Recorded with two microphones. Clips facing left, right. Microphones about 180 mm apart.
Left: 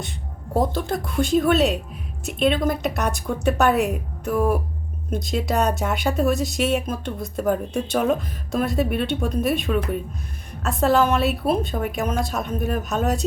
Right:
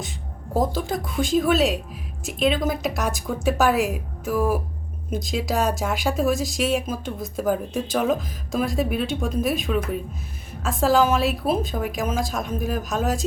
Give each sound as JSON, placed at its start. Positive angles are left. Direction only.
{"t": 0.5, "sound": "speech", "side_deg": 0}